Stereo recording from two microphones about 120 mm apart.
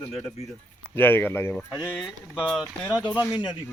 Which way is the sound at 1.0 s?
20° left (ahead or behind).